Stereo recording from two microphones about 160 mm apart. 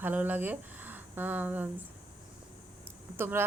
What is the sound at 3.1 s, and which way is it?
Speech, 15° right (ahead or behind).